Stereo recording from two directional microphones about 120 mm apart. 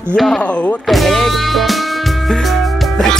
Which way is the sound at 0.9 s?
Centre (ahead or behind).